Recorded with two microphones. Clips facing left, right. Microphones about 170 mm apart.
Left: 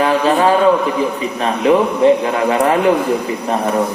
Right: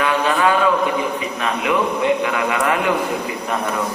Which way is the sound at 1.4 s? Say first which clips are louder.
Left 7 dB; 35° left (ahead or behind).